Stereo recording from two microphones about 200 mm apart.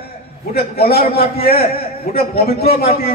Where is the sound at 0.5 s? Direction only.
50° left (ahead or behind).